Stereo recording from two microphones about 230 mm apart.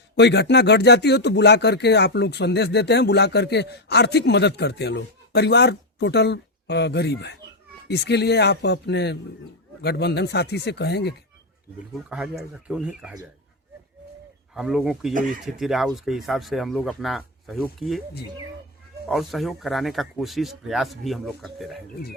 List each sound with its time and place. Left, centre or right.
0.2 s speech: left
12.0 s speech: centre
14.5 s speech: centre
19.0 s speech: centre